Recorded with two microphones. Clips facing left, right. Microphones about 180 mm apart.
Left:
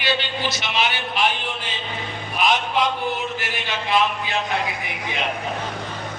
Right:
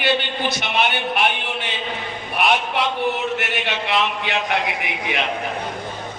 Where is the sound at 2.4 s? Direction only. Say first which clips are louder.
Right 1 dB; 65° right (ahead or behind).